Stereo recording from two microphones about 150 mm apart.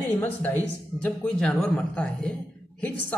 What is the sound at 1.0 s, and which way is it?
A man's voice, 5° left (ahead or behind).